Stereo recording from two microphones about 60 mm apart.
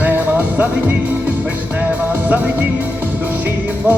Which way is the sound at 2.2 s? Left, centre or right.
Right.